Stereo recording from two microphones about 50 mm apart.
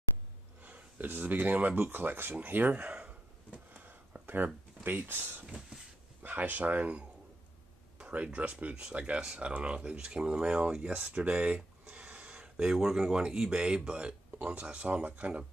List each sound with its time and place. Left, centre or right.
0.6 s speech: right
2.8 s a sound: right
4.8 s speech: right
5.5 s a sound: centre
6.2 s speech: right
8.0 s speech: right